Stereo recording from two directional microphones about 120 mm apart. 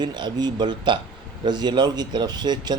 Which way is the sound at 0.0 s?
35° right (ahead or behind).